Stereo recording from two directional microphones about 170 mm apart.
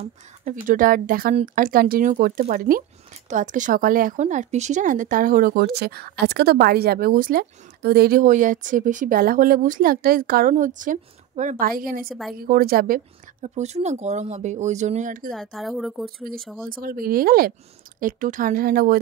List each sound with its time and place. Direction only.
0.0 s speech: 50° right (ahead or behind)
13.6 s speech: 40° right (ahead or behind)
15.5 s speech: centre (ahead or behind)
16.6 s speech: 55° right (ahead or behind)